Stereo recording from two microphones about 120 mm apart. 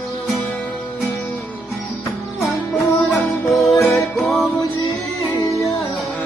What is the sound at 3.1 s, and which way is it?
Music, centre (ahead or behind).